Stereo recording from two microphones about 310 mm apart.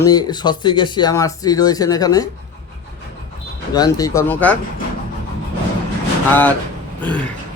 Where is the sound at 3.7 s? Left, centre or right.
Centre.